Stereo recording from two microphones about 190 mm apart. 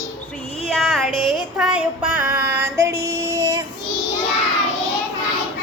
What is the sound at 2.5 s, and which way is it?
Female singing, 10° right (ahead or behind).